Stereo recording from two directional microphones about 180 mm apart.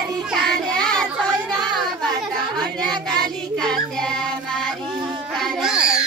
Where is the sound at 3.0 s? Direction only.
5° left (ahead or behind).